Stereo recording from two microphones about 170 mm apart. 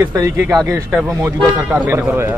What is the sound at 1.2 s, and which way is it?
A man's voice, 20° right (ahead or behind).